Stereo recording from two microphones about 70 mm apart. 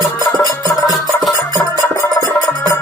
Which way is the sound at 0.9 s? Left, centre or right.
Centre.